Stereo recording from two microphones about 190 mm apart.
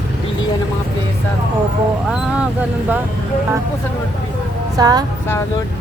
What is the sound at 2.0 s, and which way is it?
Vehicle, 5° right (ahead or behind).